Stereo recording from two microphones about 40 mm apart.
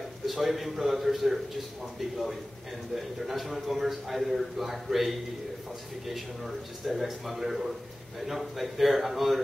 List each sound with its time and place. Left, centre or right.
0.3 s a man's voice: centre